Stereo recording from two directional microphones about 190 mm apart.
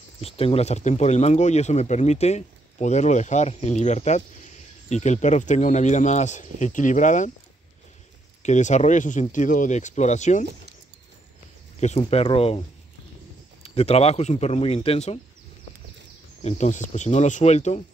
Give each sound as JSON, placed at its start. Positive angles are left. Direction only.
{"t": 0.2, "sound": "speech", "side_deg": 30}
{"t": 8.4, "sound": "speech", "side_deg": 40}
{"t": 11.8, "sound": "speech", "side_deg": 35}
{"t": 16.4, "sound": "speech", "side_deg": 40}